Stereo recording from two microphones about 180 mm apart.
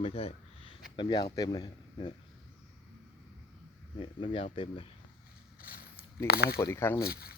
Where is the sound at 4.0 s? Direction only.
30° left (ahead or behind).